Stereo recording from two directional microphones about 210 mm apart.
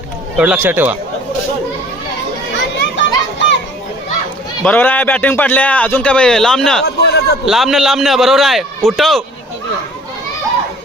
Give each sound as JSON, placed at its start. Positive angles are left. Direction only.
{"t": 0.3, "sound": "speech", "side_deg": -5}
{"t": 2.9, "sound": "children playing", "side_deg": 55}
{"t": 4.6, "sound": "a man's voice", "side_deg": 10}
{"t": 6.8, "sound": "a sound", "side_deg": 50}
{"t": 7.4, "sound": "a man's voice", "side_deg": 0}